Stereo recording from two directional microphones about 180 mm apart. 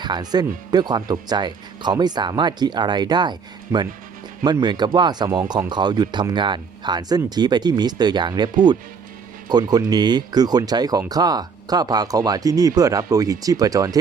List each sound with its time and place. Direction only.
0.0 s speech: 25° right (ahead or behind)